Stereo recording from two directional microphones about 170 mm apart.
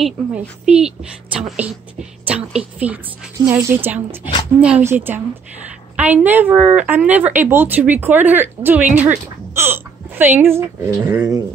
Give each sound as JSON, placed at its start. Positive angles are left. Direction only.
{"t": 0.0, "sound": "speech", "side_deg": -5}
{"t": 2.2, "sound": "speech", "side_deg": -5}